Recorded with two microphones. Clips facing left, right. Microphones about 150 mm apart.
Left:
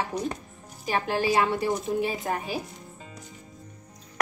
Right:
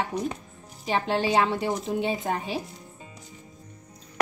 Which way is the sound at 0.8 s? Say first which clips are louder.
Right 1 dB; 25° right (ahead or behind).